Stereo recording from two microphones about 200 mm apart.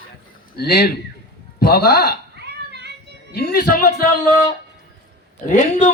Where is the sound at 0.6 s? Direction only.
50° left (ahead or behind).